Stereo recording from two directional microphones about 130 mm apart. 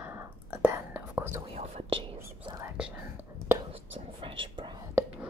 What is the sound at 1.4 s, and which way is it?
Whispering, 45° right (ahead or behind).